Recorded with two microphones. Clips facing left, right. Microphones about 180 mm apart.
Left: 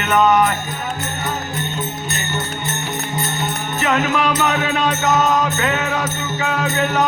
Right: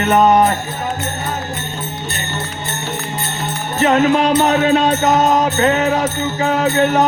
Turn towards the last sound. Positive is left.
turn(degrees=-40)  # may be behind; listen again after turning